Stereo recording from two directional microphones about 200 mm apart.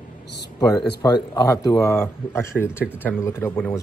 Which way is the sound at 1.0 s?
20° left (ahead or behind).